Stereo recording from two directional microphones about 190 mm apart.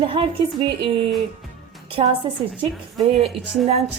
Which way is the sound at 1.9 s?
25° right (ahead or behind).